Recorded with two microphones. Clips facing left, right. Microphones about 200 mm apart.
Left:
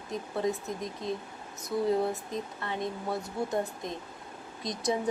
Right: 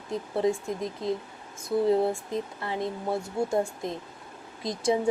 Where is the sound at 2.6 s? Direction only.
30° right (ahead or behind).